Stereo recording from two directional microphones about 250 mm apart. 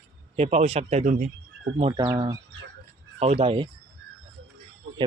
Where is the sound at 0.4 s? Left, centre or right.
Right.